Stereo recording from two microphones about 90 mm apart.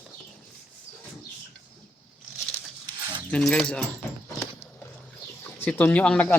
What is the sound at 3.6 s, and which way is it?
Speech, 10° left (ahead or behind).